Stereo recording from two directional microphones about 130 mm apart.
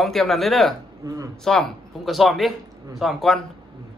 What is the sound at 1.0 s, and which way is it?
Speech, 25° right (ahead or behind).